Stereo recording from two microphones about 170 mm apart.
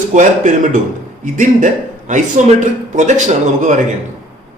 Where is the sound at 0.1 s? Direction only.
45° right (ahead or behind).